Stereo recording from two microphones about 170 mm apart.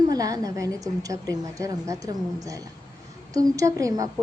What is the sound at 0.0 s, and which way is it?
A woman's voice, 20° right (ahead or behind).